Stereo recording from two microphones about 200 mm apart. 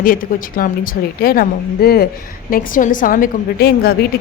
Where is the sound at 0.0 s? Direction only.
45° left (ahead or behind).